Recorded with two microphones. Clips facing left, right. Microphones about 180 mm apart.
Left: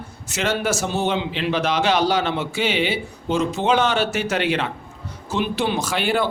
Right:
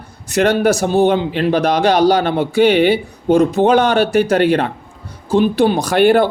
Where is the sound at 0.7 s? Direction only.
55° right (ahead or behind).